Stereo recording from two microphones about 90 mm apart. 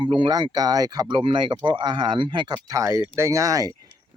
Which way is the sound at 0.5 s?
45° right (ahead or behind).